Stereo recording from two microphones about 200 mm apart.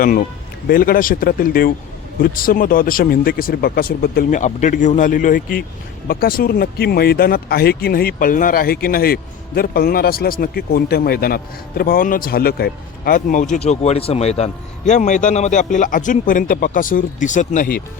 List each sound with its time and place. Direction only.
0.7 s speech: 45° left (ahead or behind)